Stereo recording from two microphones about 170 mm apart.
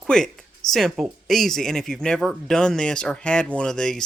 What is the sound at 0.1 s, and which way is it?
Speech, 5° left (ahead or behind).